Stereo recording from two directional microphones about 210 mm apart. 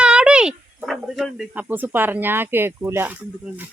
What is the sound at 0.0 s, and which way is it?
Speech, 5° right (ahead or behind).